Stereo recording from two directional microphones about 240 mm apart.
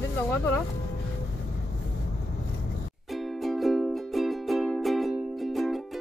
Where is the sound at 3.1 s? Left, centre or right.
Centre.